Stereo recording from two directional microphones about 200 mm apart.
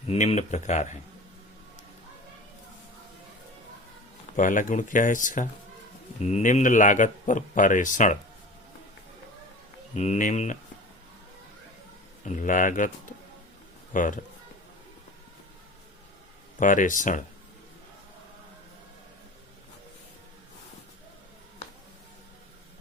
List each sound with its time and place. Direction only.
0.1 s speech: 35° left (ahead or behind)
4.4 s speech: 40° left (ahead or behind)
9.9 s speech: 35° left (ahead or behind)
12.2 s speech: 40° left (ahead or behind)
16.6 s speech: 40° left (ahead or behind)